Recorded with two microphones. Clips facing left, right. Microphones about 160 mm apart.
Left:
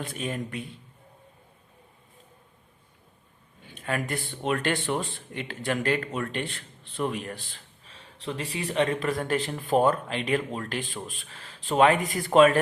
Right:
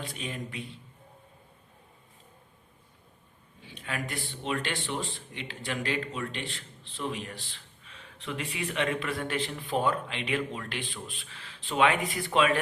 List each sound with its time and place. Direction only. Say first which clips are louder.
0.0 s speech: left 5 dB; 50° left (ahead or behind)
3.6 s speech: left 6 dB; 50° left (ahead or behind)